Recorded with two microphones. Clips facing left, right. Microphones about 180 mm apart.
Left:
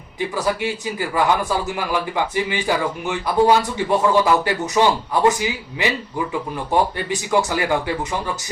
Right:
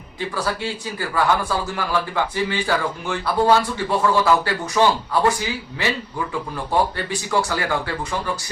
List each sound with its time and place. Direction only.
0.3 s a man's voice: 15° left (ahead or behind)